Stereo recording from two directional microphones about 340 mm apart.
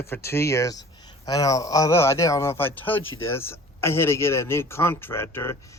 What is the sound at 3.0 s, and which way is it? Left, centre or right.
Speech, left.